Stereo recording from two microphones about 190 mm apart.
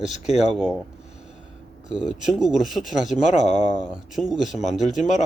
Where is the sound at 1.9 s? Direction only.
5° right (ahead or behind).